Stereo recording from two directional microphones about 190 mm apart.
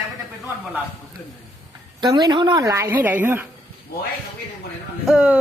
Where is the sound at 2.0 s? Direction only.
20° right (ahead or behind).